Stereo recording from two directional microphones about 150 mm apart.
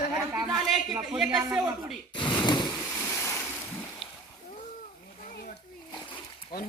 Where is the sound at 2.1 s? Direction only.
30° left (ahead or behind).